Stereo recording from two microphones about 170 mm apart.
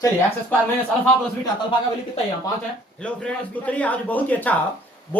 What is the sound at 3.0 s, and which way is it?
A man's voice, 10° left (ahead or behind).